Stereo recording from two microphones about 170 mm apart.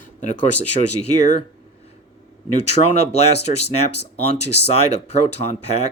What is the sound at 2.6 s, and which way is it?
Speech, 40° left (ahead or behind).